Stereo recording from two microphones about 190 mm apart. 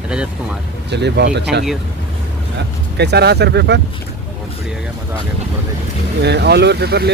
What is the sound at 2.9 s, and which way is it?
Speech, 60° right (ahead or behind).